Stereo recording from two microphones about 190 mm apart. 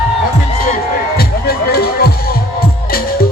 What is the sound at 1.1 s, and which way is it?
Music, 55° left (ahead or behind).